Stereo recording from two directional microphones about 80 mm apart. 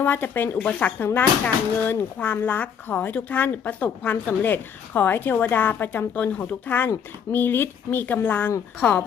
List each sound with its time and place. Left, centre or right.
0.0 s speech: left